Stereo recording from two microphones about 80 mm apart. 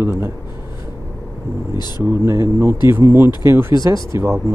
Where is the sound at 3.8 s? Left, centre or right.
Right.